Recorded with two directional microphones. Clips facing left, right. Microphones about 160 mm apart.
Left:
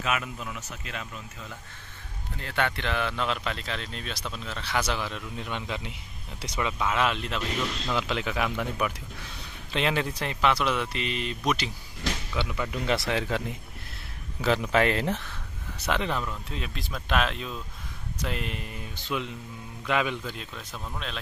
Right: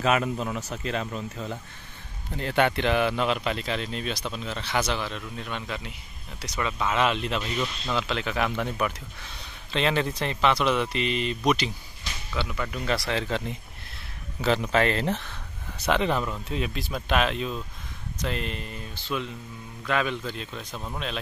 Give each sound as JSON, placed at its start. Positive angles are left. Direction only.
{"t": 0.0, "sound": "speech", "side_deg": -35}
{"t": 2.3, "sound": "speech", "side_deg": -20}
{"t": 5.4, "sound": "speech", "side_deg": 15}
{"t": 6.5, "sound": "speech", "side_deg": 5}
{"t": 7.9, "sound": "speech", "side_deg": 10}
{"t": 12.4, "sound": "speech", "side_deg": 15}
{"t": 15.9, "sound": "speech", "side_deg": 0}
{"t": 20.5, "sound": "speech", "side_deg": -15}